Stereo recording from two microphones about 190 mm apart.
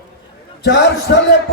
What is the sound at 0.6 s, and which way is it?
Speech, 65° left (ahead or behind).